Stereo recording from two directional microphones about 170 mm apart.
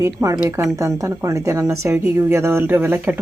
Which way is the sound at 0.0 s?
15° right (ahead or behind).